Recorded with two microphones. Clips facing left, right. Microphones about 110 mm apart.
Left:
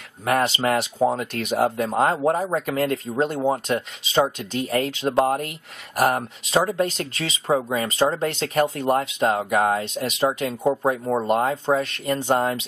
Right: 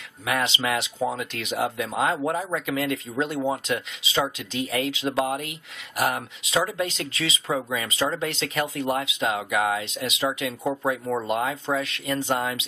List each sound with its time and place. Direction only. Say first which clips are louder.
0.2 s speech: left 5 dB; 40° left (ahead or behind)